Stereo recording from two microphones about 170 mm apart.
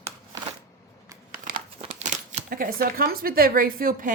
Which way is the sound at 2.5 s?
60° right (ahead or behind).